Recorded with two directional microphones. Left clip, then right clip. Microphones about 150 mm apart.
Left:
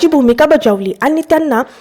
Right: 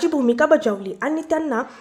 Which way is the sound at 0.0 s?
50° left (ahead or behind).